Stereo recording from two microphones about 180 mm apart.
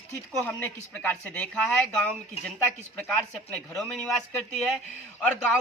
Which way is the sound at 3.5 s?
5° left (ahead or behind).